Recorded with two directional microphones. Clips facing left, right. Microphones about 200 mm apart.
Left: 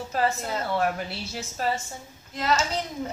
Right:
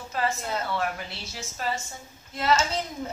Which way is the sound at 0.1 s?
40° left (ahead or behind).